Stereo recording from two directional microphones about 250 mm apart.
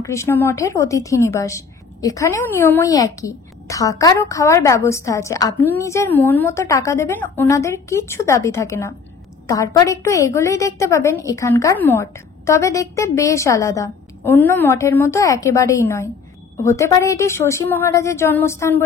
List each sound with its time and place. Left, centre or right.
0.0 s a woman's voice: centre